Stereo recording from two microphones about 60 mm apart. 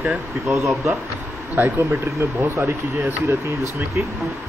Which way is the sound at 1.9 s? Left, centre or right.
Right.